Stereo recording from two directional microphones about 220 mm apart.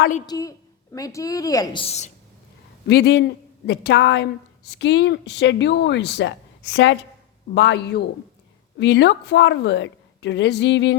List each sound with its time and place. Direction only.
0.3 s a woman's voice: 15° left (ahead or behind)
2.8 s speech: 45° left (ahead or behind)